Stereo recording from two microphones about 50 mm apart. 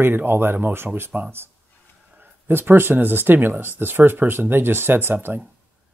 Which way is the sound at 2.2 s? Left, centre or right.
Right.